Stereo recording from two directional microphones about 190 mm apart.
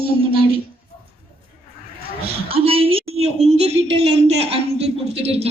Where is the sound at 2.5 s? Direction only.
30° right (ahead or behind).